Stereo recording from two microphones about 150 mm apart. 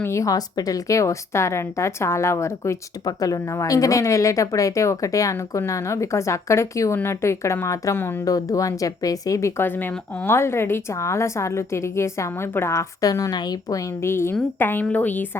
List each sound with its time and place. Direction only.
0.0 s a woman's voice: 20° left (ahead or behind)